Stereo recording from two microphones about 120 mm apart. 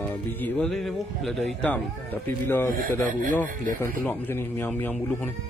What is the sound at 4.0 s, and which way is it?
Speech, 15° left (ahead or behind).